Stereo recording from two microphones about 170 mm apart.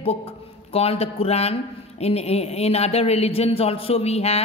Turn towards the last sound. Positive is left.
turn(degrees=35)  # may be behind; listen again after turning